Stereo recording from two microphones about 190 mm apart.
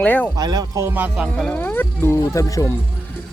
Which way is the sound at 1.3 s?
5° left (ahead or behind).